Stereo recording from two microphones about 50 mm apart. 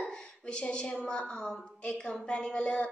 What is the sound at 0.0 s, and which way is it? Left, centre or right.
A woman's voice, left.